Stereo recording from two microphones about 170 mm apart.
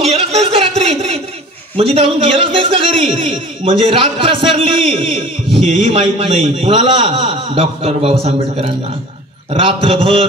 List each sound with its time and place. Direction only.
0.0 s a sound: 35° right (ahead or behind)
1.8 s a man's voice: 35° right (ahead or behind)
5.0 s a man's voice: centre (ahead or behind)
5.9 s a man's voice: 35° right (ahead or behind)